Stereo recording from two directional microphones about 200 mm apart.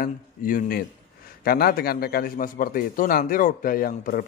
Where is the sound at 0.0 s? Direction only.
45° left (ahead or behind).